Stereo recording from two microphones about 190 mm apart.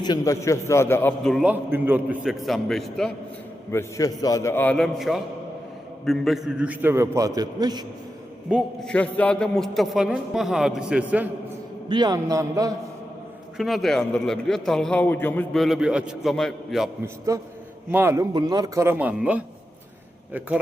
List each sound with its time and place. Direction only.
0.0 s a man's voice: 20° left (ahead or behind); by 3.1 s centre (ahead or behind)
3.7 s a man's voice: 15° left (ahead or behind); by 7.9 s 20° right (ahead or behind)
8.4 s a man's voice: centre (ahead or behind)
11.9 s a man's voice: 20° right (ahead or behind)
13.6 s a man's voice: centre (ahead or behind)
17.3 s a man's voice: 15° right (ahead or behind)